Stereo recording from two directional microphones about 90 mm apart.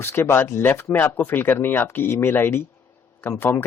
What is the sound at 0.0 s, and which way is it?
Speech, 25° left (ahead or behind).